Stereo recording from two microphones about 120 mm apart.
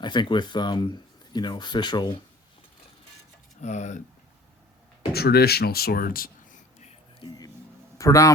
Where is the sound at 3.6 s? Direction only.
75° left (ahead or behind).